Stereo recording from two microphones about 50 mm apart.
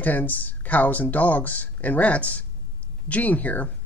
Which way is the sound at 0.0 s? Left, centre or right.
Left.